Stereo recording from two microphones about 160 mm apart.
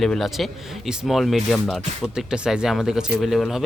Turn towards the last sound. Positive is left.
turn(degrees=0)  # may be behind; listen again after turning